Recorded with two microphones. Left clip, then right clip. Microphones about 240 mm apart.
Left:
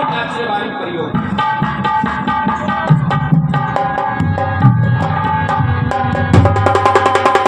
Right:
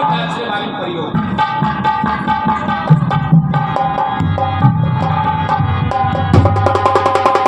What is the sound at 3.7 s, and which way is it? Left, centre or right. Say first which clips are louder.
Music: right 1 dB; left.